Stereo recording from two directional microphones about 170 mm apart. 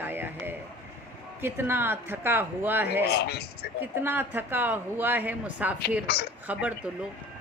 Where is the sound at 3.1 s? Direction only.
70° left (ahead or behind).